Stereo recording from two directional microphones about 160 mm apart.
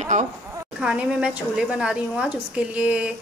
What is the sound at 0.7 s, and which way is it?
A woman's voice, 5° right (ahead or behind).